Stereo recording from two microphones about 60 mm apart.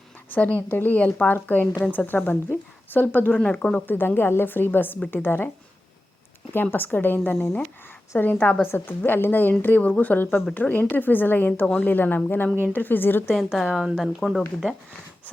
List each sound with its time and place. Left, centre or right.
0.3 s a woman's voice: left
3.4 s speech: centre
3.8 s speech: left
6.5 s a woman's voice: left
9.0 s speech: left
13.3 s speech: centre